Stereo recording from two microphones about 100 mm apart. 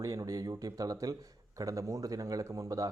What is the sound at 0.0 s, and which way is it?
Speech, 35° right (ahead or behind).